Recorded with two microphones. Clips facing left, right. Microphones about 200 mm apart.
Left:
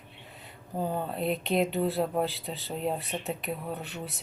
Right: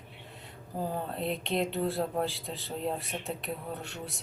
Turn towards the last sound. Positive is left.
turn(degrees=0)  # may be behind; listen again after turning